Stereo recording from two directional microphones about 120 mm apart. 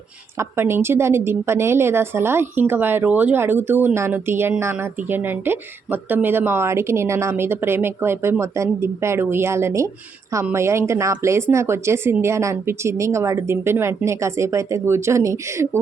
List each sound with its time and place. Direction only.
0.3 s speech: 20° right (ahead or behind)